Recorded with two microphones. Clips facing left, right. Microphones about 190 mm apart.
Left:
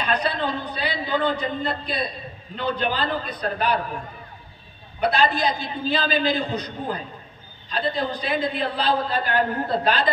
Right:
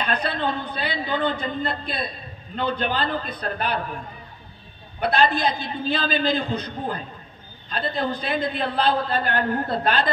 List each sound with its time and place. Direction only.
0.0 s a man's voice: 50° right (ahead or behind)
5.0 s a man's voice: 50° right (ahead or behind)